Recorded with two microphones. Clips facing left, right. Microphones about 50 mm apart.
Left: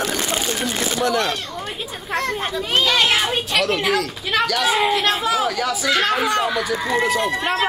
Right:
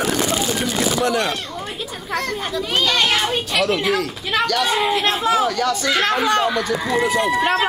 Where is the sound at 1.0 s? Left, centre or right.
Centre.